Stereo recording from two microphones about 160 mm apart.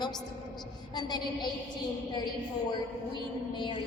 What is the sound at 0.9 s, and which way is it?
Speech, 25° left (ahead or behind).